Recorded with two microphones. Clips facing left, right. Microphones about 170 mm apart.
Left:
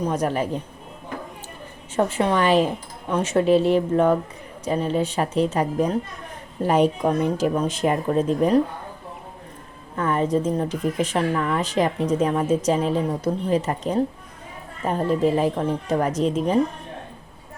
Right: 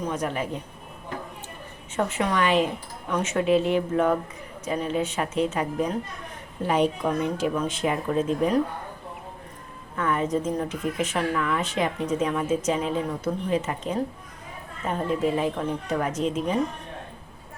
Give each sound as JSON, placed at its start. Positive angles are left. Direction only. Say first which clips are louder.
{"t": 0.1, "sound": "speech", "louder": "left 4 dB", "side_deg": 40}
{"t": 2.0, "sound": "speech", "louder": "left 4 dB", "side_deg": 35}
{"t": 9.9, "sound": "speech", "louder": "left 3 dB", "side_deg": 35}